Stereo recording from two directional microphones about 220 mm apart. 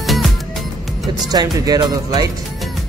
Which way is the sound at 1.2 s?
15° right (ahead or behind).